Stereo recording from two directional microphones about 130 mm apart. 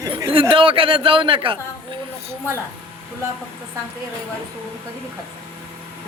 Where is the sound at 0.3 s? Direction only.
40° right (ahead or behind).